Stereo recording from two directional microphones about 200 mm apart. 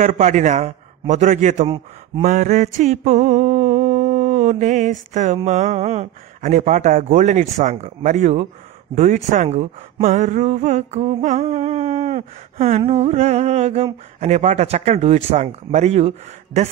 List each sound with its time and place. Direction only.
0.0 s speech: 40° right (ahead or behind)
2.2 s a sound: 40° right (ahead or behind)
5.1 s speech: 35° right (ahead or behind)